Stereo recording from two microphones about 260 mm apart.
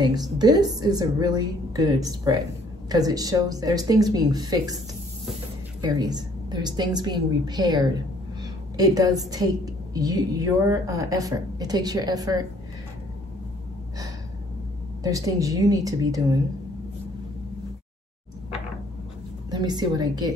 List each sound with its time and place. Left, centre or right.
0.4 s a woman's voice: centre
5.8 s a woman's voice: centre
15.0 s a woman's voice: centre
19.5 s a woman's voice: centre